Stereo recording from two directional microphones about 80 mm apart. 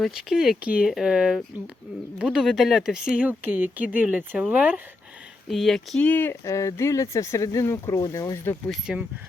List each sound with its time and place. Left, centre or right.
0.1 s a sound: centre
0.6 s speech: centre
3.2 s speech: right
5.5 s a sound: centre
6.0 s speech: left
6.4 s speech: left
8.9 s speech: centre